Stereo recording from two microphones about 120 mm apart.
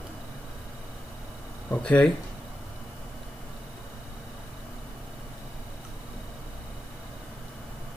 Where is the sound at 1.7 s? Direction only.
10° left (ahead or behind).